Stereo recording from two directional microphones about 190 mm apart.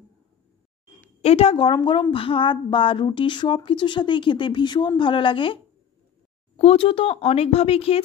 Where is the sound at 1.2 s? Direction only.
30° left (ahead or behind).